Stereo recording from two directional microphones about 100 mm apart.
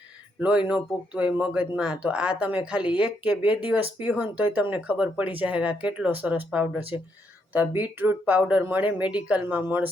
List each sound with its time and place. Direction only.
0.3 s speech: 10° right (ahead or behind)